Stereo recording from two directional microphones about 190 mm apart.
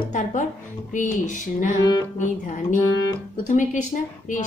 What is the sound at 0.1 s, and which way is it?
Music, 40° left (ahead or behind).